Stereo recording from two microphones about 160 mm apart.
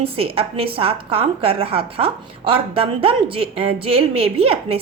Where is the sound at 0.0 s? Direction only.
35° right (ahead or behind).